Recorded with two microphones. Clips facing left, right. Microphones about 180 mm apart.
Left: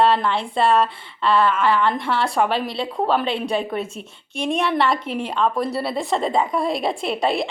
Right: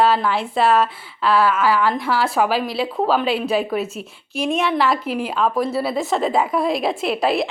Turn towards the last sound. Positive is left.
turn(degrees=0)  # may be behind; listen again after turning